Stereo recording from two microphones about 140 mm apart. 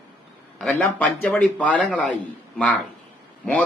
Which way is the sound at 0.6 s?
5° left (ahead or behind).